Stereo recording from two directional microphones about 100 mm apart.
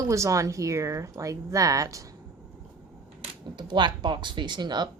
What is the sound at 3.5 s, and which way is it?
Speech, 50° right (ahead or behind).